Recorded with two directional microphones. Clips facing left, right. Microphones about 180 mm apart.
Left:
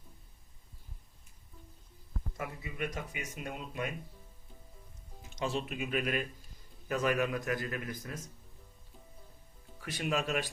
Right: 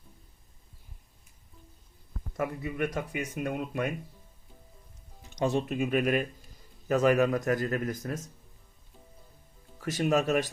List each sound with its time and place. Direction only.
2.4 s speech: 60° right (ahead or behind)
5.6 s speech: 45° right (ahead or behind)
9.8 s speech: 45° right (ahead or behind)